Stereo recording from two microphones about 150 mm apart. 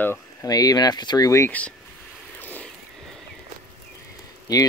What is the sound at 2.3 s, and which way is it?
Vehicle, 10° left (ahead or behind).